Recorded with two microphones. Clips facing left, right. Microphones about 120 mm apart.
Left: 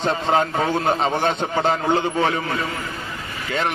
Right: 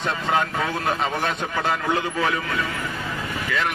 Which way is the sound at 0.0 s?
30° left (ahead or behind).